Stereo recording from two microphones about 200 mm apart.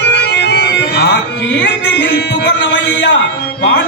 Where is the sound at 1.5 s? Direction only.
60° left (ahead or behind).